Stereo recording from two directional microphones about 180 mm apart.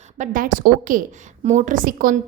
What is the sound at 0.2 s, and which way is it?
A woman's voice, 50° right (ahead or behind).